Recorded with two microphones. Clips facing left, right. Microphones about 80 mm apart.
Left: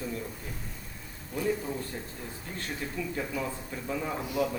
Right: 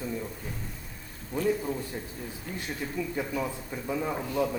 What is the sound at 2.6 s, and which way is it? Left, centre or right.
A man's voice, centre.